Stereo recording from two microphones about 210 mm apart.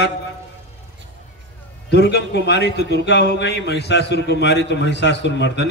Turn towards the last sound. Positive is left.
turn(degrees=55)  # may be behind; listen again after turning